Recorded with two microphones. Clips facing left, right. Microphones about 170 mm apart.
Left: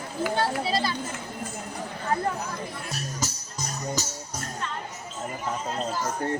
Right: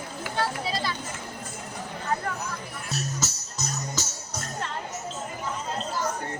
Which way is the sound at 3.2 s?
10° left (ahead or behind).